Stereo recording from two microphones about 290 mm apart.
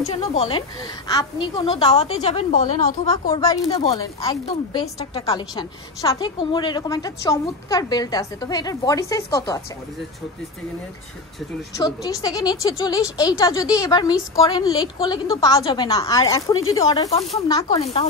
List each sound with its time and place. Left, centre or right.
0.0 s a woman's voice: left
11.7 s a woman's voice: centre